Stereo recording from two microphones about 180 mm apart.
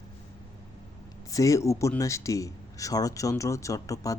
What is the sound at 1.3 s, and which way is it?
Speech, 15° left (ahead or behind).